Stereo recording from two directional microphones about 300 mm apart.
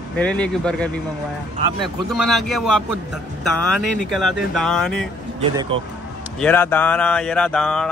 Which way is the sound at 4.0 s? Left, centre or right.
Centre.